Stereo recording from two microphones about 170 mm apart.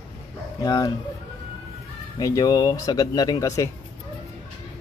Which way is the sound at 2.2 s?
20° left (ahead or behind).